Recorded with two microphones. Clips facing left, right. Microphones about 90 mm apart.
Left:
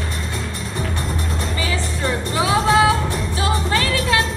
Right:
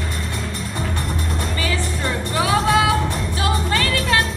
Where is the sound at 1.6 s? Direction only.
20° left (ahead or behind).